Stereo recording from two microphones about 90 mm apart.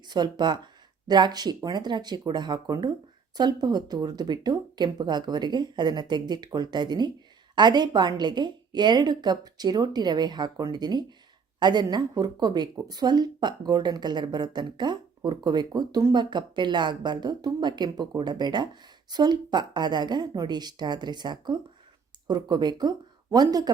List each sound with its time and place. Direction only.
0.1 s speech: 50° right (ahead or behind)